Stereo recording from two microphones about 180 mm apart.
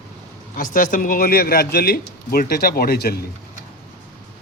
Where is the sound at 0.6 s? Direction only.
45° left (ahead or behind).